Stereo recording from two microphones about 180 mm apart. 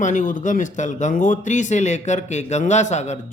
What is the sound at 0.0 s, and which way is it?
Speech, 45° left (ahead or behind).